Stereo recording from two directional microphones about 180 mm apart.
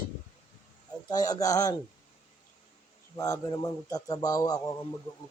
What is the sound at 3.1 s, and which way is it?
Speech, 15° left (ahead or behind).